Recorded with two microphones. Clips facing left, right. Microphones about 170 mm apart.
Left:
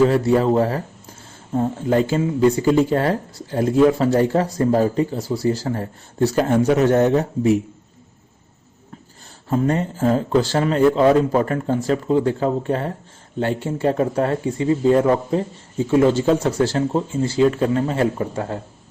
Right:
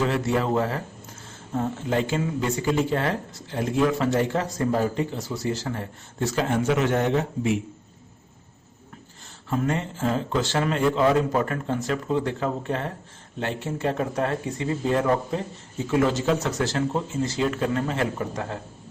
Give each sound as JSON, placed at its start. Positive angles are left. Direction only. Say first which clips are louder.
{"t": 0.1, "sound": "speech", "louder": "left 7 dB", "side_deg": 35}
{"t": 9.5, "sound": "speech", "louder": "left 6 dB", "side_deg": 35}